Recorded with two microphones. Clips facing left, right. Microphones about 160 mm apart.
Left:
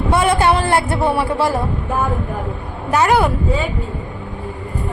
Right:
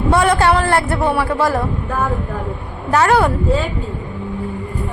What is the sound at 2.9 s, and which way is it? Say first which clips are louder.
Speech: right 1 dB; 15° left (ahead or behind).